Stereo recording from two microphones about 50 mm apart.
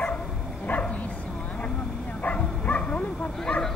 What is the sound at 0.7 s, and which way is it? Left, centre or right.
Bow-wow, left.